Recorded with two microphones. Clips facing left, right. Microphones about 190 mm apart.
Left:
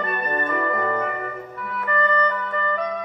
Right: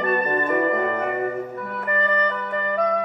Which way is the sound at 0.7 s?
30° right (ahead or behind).